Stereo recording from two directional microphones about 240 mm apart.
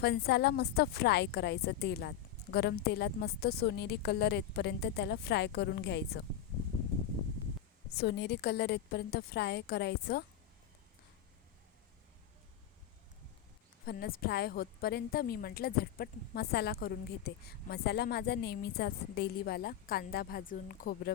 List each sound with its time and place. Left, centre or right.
0.0 s a woman's voice: left
7.9 s a woman's voice: left
13.8 s a woman's voice: left